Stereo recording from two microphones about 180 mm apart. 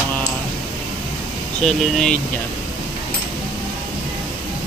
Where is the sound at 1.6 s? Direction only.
5° left (ahead or behind).